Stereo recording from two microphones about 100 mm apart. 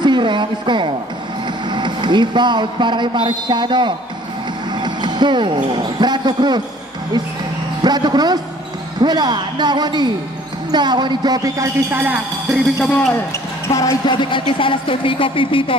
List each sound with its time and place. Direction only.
0.0 s a sound: 50° right (ahead or behind)
1.7 s speech: 50° right (ahead or behind)
7.8 s speech: 45° right (ahead or behind)
11.9 s speech: 20° right (ahead or behind)
12.8 s speech: 5° left (ahead or behind)
13.7 s speech: 30° left (ahead or behind)
14.0 s speech: 55° left (ahead or behind)